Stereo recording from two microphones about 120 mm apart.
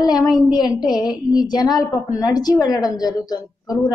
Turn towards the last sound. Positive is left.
turn(degrees=30)  # may be behind; listen again after turning